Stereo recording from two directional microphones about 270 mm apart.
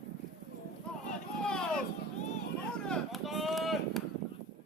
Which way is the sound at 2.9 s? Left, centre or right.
Centre.